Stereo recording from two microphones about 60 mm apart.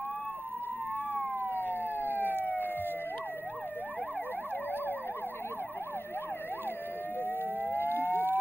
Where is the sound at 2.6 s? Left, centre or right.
Right.